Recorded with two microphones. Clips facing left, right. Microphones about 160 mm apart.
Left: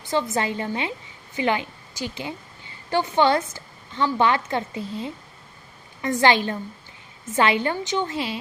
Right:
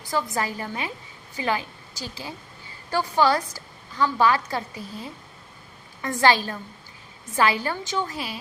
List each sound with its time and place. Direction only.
0.0 s a woman's voice: 25° left (ahead or behind)